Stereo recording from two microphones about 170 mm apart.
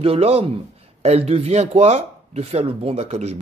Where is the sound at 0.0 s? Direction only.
35° right (ahead or behind).